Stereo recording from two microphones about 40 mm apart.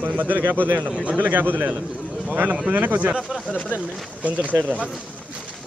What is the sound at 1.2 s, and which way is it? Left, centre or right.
Speech, right.